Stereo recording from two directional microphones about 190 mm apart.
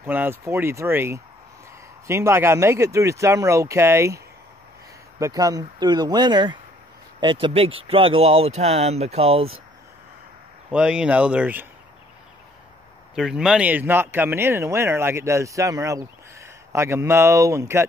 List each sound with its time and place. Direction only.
0.0 s speech: 10° right (ahead or behind)
5.2 s speech: 20° right (ahead or behind)
10.7 s speech: 5° right (ahead or behind)
13.1 s speech: 5° right (ahead or behind)